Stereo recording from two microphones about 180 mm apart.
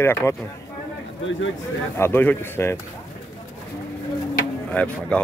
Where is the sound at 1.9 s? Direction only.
10° left (ahead or behind).